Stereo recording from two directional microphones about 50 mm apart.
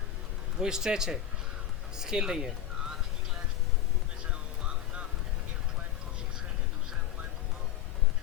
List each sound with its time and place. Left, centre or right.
0.6 s speech: centre